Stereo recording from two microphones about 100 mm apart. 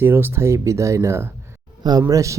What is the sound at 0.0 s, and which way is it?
Speech, 20° right (ahead or behind).